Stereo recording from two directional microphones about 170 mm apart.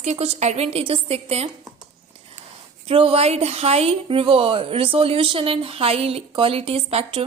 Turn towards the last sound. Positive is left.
turn(degrees=-35)  # may be behind; listen again after turning